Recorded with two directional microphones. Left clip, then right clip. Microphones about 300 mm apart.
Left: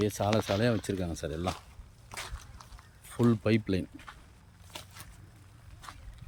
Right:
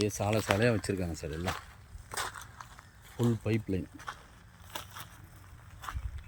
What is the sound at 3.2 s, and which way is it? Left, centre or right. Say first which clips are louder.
Speech: left 5 dB; centre.